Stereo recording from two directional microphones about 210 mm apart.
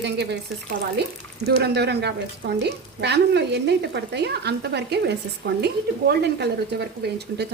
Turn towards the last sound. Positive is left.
turn(degrees=-50)  # may be behind; listen again after turning